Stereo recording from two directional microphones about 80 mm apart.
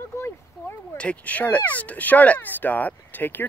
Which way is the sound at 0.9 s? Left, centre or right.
Centre.